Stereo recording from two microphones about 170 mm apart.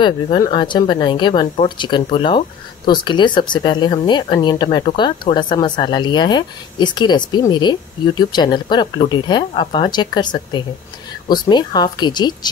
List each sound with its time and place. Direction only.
0.0 s speech: 30° left (ahead or behind)